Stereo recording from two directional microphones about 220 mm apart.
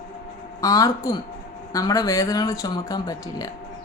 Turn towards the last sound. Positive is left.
turn(degrees=15)  # may be behind; listen again after turning